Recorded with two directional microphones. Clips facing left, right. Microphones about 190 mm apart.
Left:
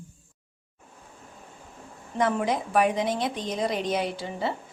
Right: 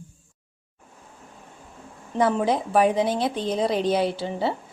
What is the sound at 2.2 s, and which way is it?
A woman's voice, 30° right (ahead or behind).